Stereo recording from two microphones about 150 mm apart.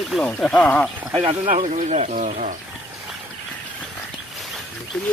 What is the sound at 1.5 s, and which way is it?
Speech, 60° right (ahead or behind).